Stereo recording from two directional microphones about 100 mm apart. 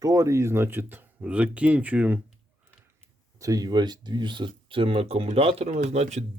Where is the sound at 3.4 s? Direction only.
35° right (ahead or behind).